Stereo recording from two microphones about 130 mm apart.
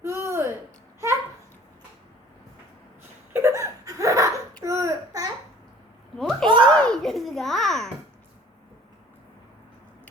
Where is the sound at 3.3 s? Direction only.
20° right (ahead or behind).